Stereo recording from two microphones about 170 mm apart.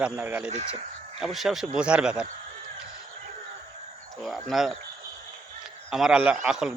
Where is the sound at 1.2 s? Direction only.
Centre (ahead or behind).